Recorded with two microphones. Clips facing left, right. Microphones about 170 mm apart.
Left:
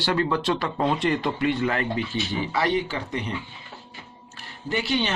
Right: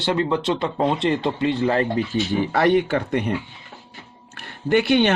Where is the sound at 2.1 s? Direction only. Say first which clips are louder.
Right 6 dB; 50° right (ahead or behind).